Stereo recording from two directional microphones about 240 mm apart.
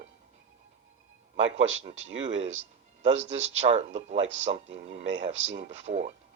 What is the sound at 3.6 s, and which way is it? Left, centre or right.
Speech, right.